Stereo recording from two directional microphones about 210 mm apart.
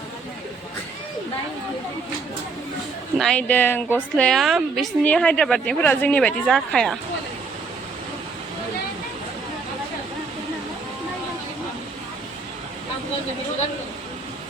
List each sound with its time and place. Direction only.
3.2 s a woman's voice: 5° left (ahead or behind)